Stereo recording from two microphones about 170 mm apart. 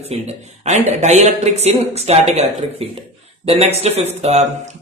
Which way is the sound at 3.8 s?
40° right (ahead or behind).